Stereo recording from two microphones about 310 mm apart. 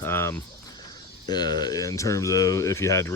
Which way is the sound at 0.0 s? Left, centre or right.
Centre.